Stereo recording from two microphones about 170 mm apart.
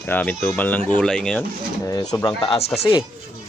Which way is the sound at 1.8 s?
20° left (ahead or behind).